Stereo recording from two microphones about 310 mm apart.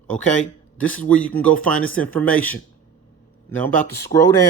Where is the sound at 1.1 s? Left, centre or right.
Centre.